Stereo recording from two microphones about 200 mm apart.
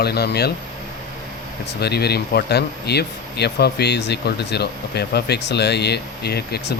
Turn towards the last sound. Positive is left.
turn(degrees=55)  # may be behind; listen again after turning